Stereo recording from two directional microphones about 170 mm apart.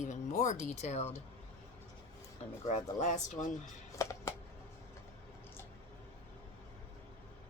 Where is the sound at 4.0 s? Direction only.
15° left (ahead or behind).